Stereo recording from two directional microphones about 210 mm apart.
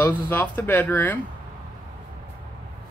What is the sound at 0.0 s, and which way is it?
Speech, 10° left (ahead or behind).